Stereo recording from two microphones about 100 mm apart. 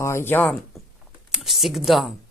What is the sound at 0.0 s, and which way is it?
Speech, 25° left (ahead or behind).